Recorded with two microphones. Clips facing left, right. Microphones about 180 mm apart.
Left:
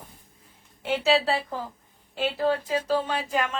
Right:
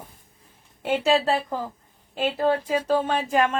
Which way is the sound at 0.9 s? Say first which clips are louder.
Right 2 dB; 50° right (ahead or behind).